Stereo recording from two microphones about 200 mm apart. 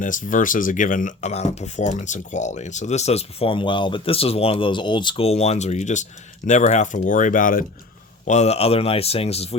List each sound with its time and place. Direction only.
0.0 s speech: 40° left (ahead or behind)